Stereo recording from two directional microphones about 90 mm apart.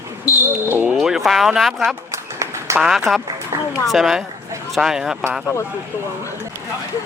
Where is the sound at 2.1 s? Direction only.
35° right (ahead or behind).